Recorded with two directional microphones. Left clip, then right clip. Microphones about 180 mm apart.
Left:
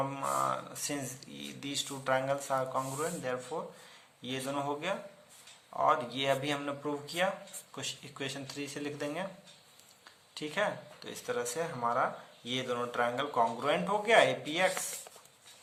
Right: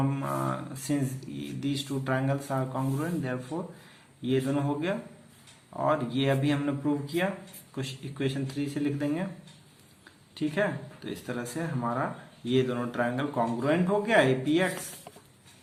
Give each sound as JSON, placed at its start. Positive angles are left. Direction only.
{"t": 0.1, "sound": "speech", "side_deg": 25}
{"t": 10.3, "sound": "speech", "side_deg": 30}